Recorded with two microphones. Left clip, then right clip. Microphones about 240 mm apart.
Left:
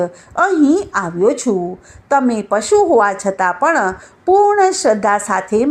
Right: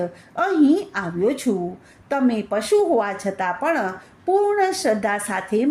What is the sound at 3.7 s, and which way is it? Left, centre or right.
A woman's voice, left.